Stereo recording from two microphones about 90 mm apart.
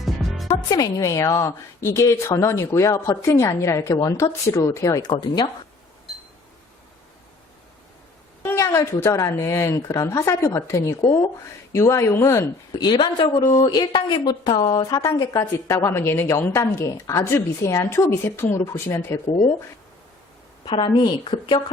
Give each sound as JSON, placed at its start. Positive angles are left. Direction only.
{"t": 0.0, "sound": "music", "side_deg": 0}
{"t": 0.4, "sound": "a woman's voice", "side_deg": 50}
{"t": 5.0, "sound": "speech", "side_deg": 50}
{"t": 8.4, "sound": "a woman's voice", "side_deg": 35}
{"t": 12.8, "sound": "a woman's voice", "side_deg": 60}
{"t": 14.7, "sound": "a woman's voice", "side_deg": 45}
{"t": 20.7, "sound": "a woman's voice", "side_deg": 75}